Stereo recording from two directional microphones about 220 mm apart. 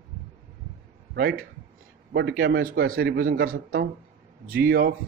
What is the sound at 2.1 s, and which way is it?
Speech, 50° right (ahead or behind).